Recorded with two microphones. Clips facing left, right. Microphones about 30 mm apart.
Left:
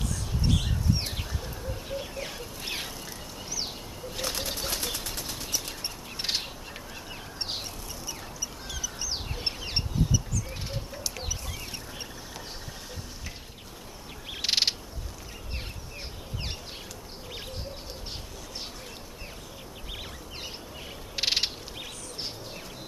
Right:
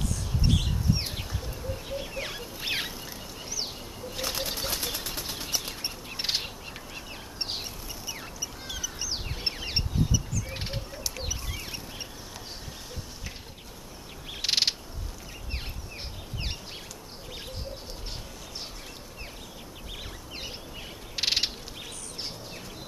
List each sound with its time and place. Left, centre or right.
0.5 s a sound: centre
1.4 s bird: centre
2.1 s a sound: right
3.5 s bird flight: centre
8.1 s fowl: centre
9.6 s bird: centre
10.9 s chicken: centre
14.3 s bird: centre
21.2 s bird: centre